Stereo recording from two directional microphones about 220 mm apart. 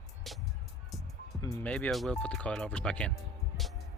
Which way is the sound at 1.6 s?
5° left (ahead or behind).